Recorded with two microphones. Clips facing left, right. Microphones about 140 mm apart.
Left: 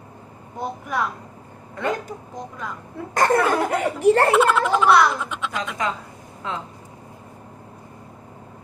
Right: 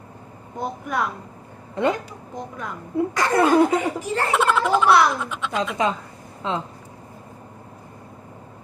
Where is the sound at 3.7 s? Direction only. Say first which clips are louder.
Left 5 dB; 60° left (ahead or behind).